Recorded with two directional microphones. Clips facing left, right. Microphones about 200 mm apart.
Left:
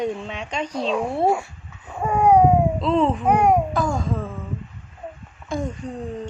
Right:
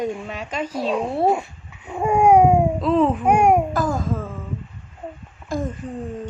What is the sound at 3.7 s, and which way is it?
Babbling, centre (ahead or behind).